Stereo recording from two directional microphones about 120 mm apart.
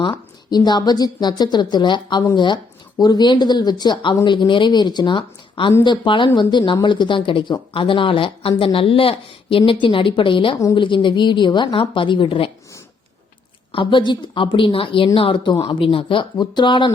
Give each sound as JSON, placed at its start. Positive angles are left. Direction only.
{"t": 0.0, "sound": "speech", "side_deg": 40}
{"t": 13.7, "sound": "speech", "side_deg": 40}